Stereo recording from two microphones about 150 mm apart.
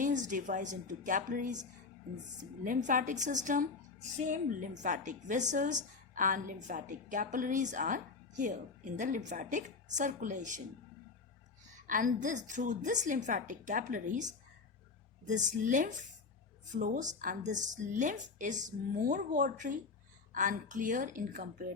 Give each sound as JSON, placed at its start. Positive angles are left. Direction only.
{"t": 0.0, "sound": "a woman's voice", "side_deg": -60}
{"t": 2.6, "sound": "a woman's voice", "side_deg": -60}
{"t": 11.9, "sound": "a woman's voice", "side_deg": -65}